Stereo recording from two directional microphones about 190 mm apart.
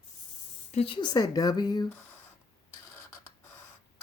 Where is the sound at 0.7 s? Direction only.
30° left (ahead or behind).